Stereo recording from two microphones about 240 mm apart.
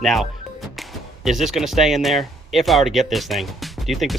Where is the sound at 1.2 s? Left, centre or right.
Centre.